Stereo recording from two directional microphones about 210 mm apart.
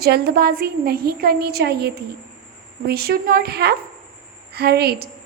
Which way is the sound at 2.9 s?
45° right (ahead or behind).